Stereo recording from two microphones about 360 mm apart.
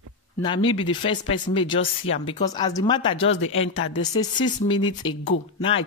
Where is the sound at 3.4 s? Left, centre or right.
Left.